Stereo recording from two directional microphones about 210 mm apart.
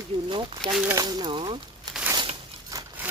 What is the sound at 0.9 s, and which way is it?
Speech, 20° right (ahead or behind).